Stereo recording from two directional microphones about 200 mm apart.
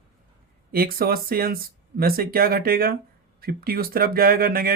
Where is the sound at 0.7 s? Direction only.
50° right (ahead or behind).